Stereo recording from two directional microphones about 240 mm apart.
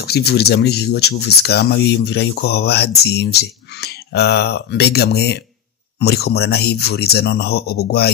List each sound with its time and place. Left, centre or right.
0.0 s speech: left